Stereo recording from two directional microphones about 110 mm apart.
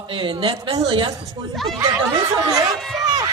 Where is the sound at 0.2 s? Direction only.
50° right (ahead or behind).